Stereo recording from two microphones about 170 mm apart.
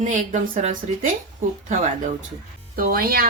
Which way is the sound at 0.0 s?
50° right (ahead or behind).